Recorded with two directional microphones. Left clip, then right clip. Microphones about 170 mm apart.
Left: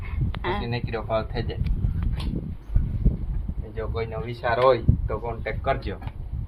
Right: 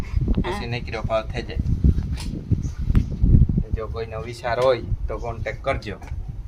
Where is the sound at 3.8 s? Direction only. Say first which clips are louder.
Left 3 dB; 30° right (ahead or behind).